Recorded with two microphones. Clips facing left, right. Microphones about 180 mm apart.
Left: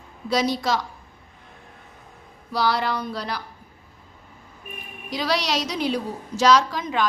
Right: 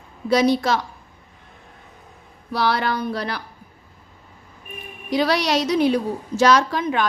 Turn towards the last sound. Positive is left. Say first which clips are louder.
# right 1 dB
turn(degrees=-60)  # may be behind; listen again after turning